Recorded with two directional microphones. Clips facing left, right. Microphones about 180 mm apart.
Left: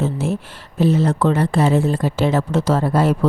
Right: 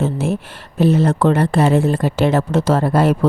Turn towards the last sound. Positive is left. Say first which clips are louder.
# right 2 dB
turn(degrees=-65)  # may be behind; listen again after turning